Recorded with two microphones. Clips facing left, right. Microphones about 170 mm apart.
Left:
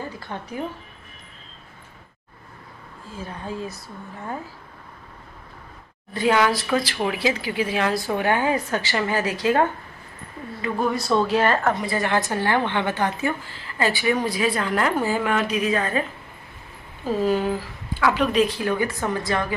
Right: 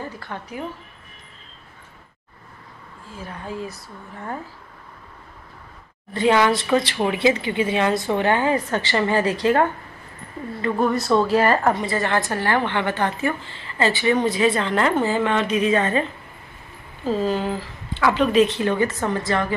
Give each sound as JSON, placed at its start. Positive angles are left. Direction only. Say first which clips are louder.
{"t": 3.2, "sound": "speech", "louder": "even", "side_deg": 20}
{"t": 6.1, "sound": "a woman's voice", "louder": "right 2 dB", "side_deg": 5}
{"t": 11.9, "sound": "a woman's voice", "louder": "right 1 dB", "side_deg": 15}
{"t": 17.1, "sound": "a woman's voice", "louder": "left 1 dB", "side_deg": 10}